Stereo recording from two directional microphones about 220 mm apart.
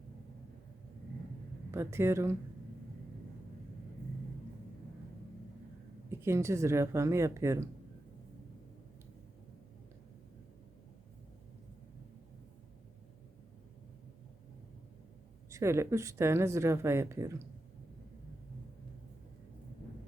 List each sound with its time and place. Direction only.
1.7 s speech: 10° right (ahead or behind)
6.1 s speech: 10° right (ahead or behind)
15.4 s speech: 15° right (ahead or behind)